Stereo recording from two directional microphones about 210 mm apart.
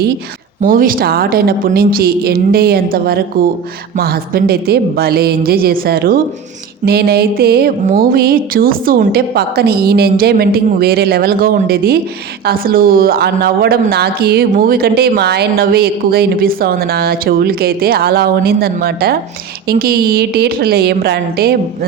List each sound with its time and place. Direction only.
0.6 s speech: 40° right (ahead or behind)